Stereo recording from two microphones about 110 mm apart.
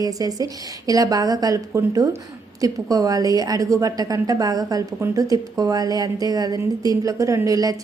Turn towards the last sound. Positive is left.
turn(degrees=-30)  # may be behind; listen again after turning